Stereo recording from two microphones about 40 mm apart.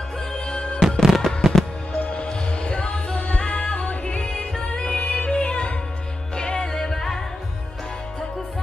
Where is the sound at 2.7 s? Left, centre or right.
Left.